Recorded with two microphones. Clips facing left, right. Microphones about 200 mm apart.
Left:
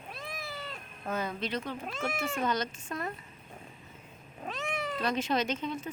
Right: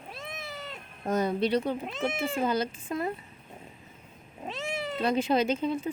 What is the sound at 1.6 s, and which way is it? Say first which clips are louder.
Speech: right 5 dB; 20° right (ahead or behind).